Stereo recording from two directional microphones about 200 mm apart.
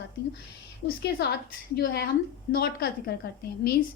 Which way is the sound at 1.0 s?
50° left (ahead or behind).